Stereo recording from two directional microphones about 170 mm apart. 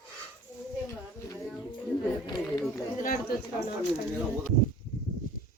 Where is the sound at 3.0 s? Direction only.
55° left (ahead or behind).